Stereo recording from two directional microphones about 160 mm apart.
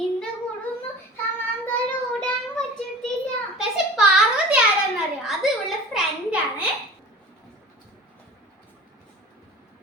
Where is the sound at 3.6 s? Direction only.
5° right (ahead or behind).